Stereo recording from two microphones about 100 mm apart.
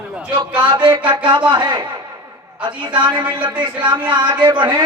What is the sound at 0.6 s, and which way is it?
Speech, 50° right (ahead or behind).